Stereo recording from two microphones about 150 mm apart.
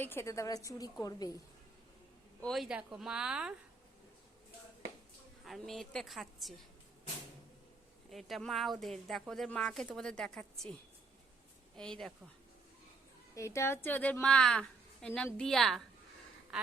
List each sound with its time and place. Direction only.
0.0 s a woman's voice: 15° left (ahead or behind)
2.4 s speech: centre (ahead or behind)
5.5 s speech: centre (ahead or behind)
8.1 s speech: centre (ahead or behind)
11.8 s speech: 5° left (ahead or behind)
13.3 s a woman's voice: 20° left (ahead or behind); by 15.8 s centre (ahead or behind)